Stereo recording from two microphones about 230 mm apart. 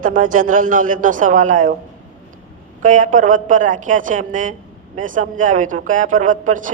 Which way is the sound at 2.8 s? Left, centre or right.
Right.